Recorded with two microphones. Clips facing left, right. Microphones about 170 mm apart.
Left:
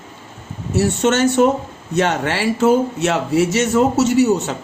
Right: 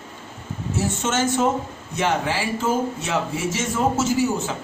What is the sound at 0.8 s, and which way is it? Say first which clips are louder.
A man's voice: left 8 dB; 70° left (ahead or behind).